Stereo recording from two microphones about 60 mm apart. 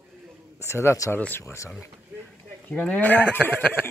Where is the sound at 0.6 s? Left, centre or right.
Left.